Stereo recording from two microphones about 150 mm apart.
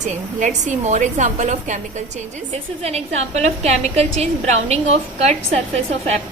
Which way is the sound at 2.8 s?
45° right (ahead or behind).